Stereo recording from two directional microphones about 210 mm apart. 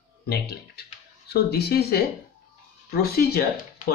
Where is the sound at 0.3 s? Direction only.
50° left (ahead or behind).